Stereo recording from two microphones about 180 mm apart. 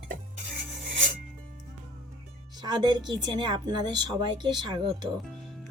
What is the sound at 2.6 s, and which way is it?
Speech, 25° right (ahead or behind).